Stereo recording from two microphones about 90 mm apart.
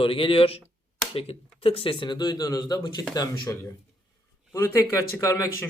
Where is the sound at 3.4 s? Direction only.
30° left (ahead or behind).